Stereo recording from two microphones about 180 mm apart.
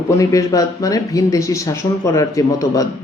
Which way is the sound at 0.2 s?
20° left (ahead or behind).